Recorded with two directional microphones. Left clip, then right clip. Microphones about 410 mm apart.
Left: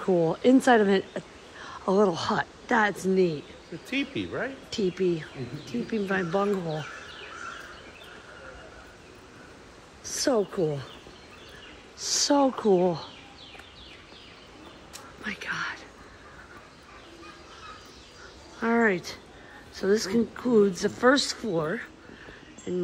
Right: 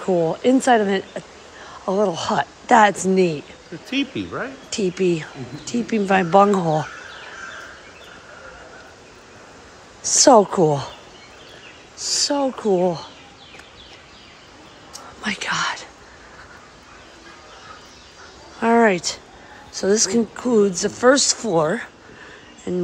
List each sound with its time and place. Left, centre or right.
0.0 s a woman's voice: centre
3.9 s speech: centre
4.7 s speech: centre
10.0 s speech: centre
12.1 s speech: centre
15.2 s speech: centre
18.6 s speech: centre